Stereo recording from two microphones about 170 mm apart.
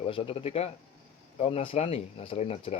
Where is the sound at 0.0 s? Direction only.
35° left (ahead or behind).